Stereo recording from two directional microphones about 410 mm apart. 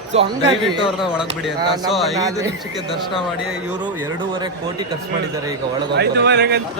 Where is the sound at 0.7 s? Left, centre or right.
Centre.